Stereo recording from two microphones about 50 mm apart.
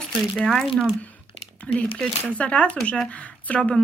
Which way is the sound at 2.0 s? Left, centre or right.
Left.